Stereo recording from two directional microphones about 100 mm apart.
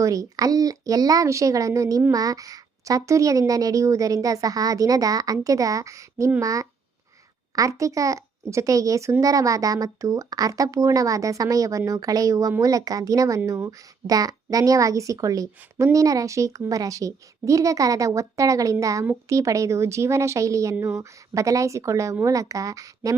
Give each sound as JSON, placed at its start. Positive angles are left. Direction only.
{"t": 0.0, "sound": "speech", "side_deg": -35}